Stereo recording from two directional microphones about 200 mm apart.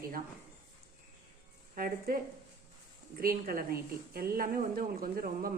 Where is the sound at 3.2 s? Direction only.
45° right (ahead or behind).